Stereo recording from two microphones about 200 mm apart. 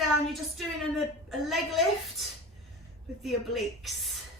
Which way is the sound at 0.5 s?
Centre (ahead or behind).